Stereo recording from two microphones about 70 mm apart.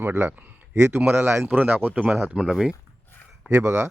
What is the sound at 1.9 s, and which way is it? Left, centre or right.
Speech, centre.